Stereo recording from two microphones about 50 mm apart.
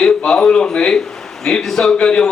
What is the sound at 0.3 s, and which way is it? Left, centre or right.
A man's voice, centre.